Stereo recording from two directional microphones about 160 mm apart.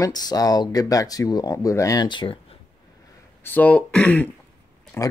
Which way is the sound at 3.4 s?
10° left (ahead or behind).